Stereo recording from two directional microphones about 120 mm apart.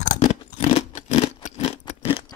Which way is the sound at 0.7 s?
65° left (ahead or behind).